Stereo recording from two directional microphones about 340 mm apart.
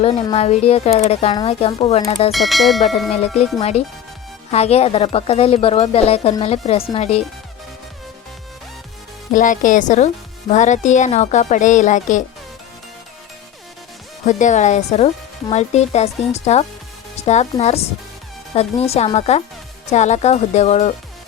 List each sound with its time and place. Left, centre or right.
0.0 s a woman's voice: centre
2.3 s speech: centre
3.6 s a woman's voice: centre
9.3 s speech: left
14.3 s speech: left